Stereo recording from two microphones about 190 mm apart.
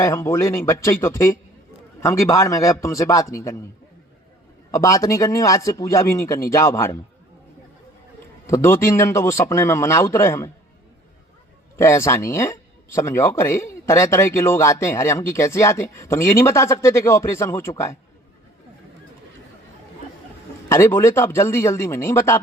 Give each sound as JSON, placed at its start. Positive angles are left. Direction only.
{"t": 0.0, "sound": "speech", "side_deg": 15}
{"t": 4.7, "sound": "speech", "side_deg": 15}
{"t": 8.4, "sound": "speech", "side_deg": 15}
{"t": 11.8, "sound": "speech", "side_deg": 15}
{"t": 20.7, "sound": "speech", "side_deg": 15}